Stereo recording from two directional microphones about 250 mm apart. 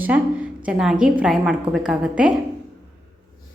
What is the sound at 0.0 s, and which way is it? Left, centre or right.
A woman's voice, centre.